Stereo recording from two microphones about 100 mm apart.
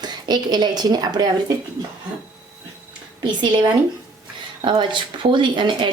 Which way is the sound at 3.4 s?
50° right (ahead or behind).